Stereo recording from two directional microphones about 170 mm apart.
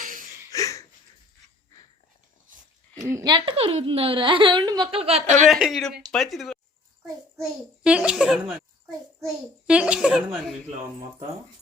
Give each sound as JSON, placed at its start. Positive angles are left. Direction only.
{"t": 0.0, "sound": "a sound", "side_deg": -50}
{"t": 0.5, "sound": "a sound", "side_deg": 20}
{"t": 3.0, "sound": "a woman's voice", "side_deg": -20}
{"t": 4.9, "sound": "a woman's voice", "side_deg": -35}
{"t": 5.5, "sound": "a child's voice", "side_deg": 0}
{"t": 7.9, "sound": "a child's voice", "side_deg": -5}